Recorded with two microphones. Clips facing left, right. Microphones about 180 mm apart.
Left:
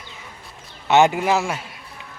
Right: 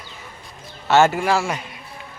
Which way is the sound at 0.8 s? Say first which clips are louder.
Even; 15° left (ahead or behind).